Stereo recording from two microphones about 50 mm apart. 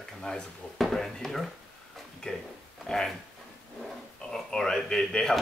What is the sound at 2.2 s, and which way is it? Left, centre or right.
Speech, centre.